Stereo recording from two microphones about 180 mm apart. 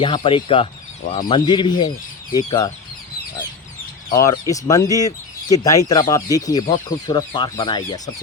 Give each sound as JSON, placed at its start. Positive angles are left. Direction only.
{"t": 0.0, "sound": "speech", "side_deg": 30}
{"t": 1.0, "sound": "speech", "side_deg": 50}
{"t": 1.3, "sound": "speech", "side_deg": 25}
{"t": 4.2, "sound": "speech", "side_deg": 20}